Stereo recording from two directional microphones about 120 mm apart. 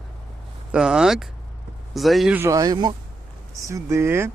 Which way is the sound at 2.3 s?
20° right (ahead or behind).